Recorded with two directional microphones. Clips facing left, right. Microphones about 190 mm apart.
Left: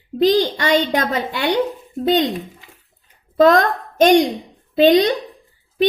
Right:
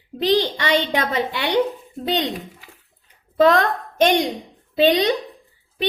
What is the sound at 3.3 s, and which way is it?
A woman's voice, 45° left (ahead or behind).